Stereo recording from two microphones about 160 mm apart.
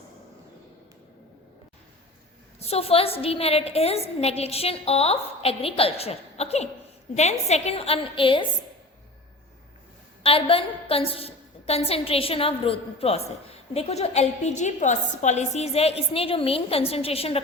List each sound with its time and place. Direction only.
2.6 s a woman's voice: 40° left (ahead or behind)
10.2 s a woman's voice: 35° left (ahead or behind)